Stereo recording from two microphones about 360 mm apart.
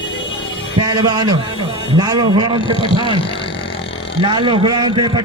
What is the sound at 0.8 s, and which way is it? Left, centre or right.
A man's voice, centre.